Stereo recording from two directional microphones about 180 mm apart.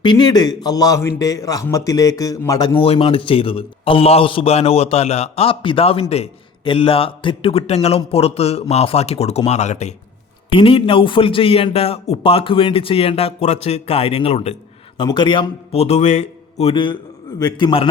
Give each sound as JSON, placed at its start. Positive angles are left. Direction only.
{"t": 0.0, "sound": "a man's voice", "side_deg": 25}